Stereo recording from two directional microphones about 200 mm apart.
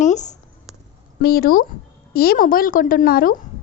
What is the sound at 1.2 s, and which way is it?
Speech, 45° left (ahead or behind).